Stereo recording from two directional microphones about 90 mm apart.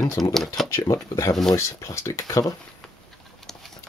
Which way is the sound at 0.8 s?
35° left (ahead or behind).